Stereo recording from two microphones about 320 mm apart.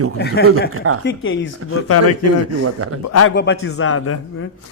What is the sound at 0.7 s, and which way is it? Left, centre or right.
Speech, right.